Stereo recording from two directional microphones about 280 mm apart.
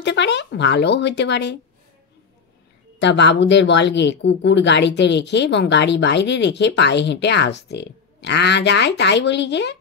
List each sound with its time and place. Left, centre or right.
0.0 s speech: left
3.0 s speech: left